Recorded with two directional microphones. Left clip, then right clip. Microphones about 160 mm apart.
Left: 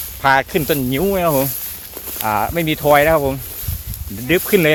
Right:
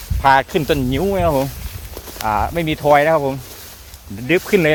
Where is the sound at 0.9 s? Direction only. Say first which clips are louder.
Left 2 dB; 15° left (ahead or behind).